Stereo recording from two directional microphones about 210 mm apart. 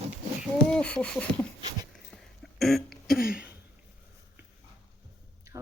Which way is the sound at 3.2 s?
5° right (ahead or behind).